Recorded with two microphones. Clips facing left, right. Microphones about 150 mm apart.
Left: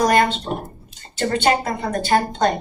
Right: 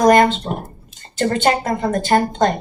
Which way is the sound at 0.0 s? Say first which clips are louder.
Right 5 dB; 45° right (ahead or behind).